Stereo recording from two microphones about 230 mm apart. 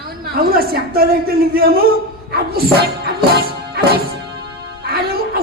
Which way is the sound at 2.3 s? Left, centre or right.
Right.